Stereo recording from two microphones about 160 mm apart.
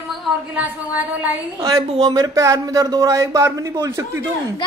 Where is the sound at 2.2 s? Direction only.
20° right (ahead or behind).